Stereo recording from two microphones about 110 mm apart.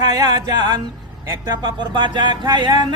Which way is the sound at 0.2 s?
35° right (ahead or behind).